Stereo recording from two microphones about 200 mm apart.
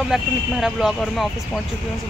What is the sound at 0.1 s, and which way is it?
Speech, centre (ahead or behind).